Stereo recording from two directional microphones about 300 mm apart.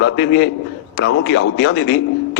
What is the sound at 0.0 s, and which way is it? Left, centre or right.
A man's voice, left.